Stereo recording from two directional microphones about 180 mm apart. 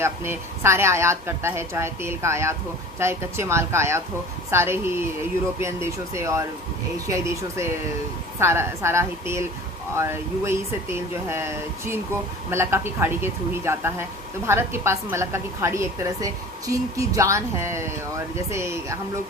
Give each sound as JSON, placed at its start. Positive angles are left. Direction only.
{"t": 0.0, "sound": "a woman's voice", "side_deg": -15}